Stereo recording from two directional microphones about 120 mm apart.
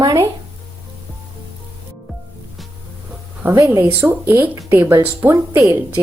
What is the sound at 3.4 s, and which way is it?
A woman's voice, 25° right (ahead or behind).